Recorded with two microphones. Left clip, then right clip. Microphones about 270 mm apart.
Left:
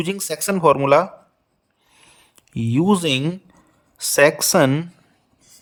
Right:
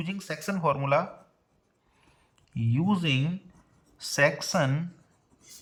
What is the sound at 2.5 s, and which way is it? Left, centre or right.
Speech, left.